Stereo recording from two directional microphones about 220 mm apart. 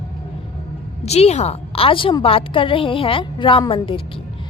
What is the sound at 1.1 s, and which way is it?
A woman's voice, 30° left (ahead or behind).